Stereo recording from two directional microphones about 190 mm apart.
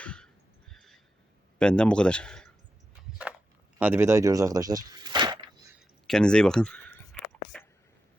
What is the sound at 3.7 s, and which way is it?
Speech, 10° right (ahead or behind).